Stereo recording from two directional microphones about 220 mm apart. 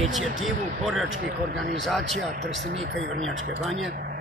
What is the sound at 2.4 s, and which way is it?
Speech, 55° right (ahead or behind).